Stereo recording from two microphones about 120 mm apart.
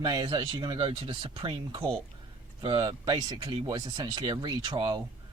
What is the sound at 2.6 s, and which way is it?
Speech, 40° right (ahead or behind).